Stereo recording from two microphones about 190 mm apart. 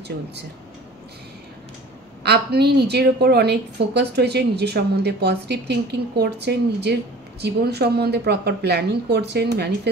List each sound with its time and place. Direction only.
2.2 s a woman's voice: 60° right (ahead or behind)